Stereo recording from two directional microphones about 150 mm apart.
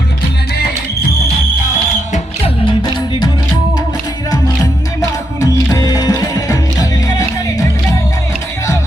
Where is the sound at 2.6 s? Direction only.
30° left (ahead or behind).